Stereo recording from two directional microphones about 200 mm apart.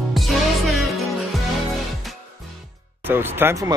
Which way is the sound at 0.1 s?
Centre (ahead or behind).